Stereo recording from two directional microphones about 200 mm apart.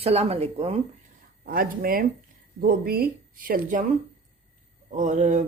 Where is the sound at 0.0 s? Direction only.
30° right (ahead or behind).